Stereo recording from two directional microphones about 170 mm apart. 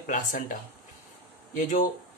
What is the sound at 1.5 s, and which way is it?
Speech, 50° left (ahead or behind).